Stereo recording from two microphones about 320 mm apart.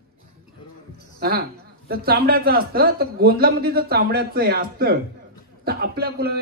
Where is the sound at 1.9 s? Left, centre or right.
Right.